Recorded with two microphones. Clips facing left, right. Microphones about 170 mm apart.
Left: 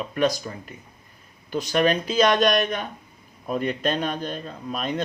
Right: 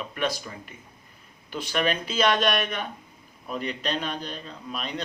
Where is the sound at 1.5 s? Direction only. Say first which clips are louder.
Left 5 dB; 40° left (ahead or behind).